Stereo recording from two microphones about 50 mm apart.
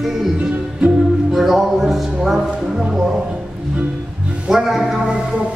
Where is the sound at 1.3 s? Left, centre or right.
Centre.